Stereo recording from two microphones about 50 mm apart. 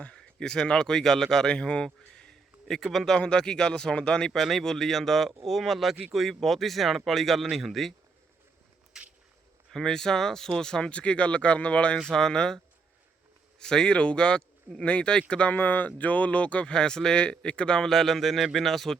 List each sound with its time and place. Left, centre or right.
0.0 s speech: centre
2.0 s a sound: centre
2.9 s speech: centre
3.2 s speech: centre
4.3 s speech: centre
8.9 s walk: centre
9.7 s speech: centre; by 11.9 s left
12.1 s speech: centre
13.6 s speech: centre
15.5 s speech: left
16.0 s speech: left
17.8 s speech: centre